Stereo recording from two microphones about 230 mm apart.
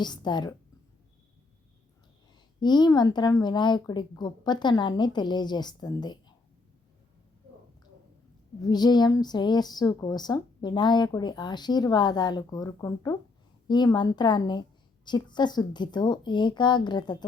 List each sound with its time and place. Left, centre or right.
0.0 s a woman's voice: centre
2.6 s a woman's voice: centre
8.6 s a woman's voice: centre